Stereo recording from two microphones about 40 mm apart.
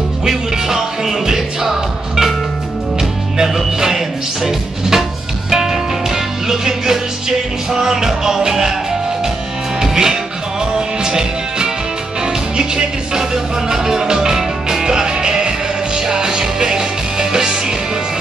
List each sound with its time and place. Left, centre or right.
0.2 s music: centre
9.8 s music: centre